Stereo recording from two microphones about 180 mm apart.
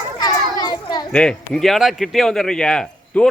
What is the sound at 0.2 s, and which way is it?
Children playing, 20° left (ahead or behind).